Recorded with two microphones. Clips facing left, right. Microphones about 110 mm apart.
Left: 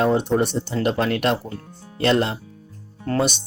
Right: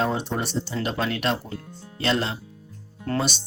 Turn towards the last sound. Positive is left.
turn(degrees=55)  # may be behind; listen again after turning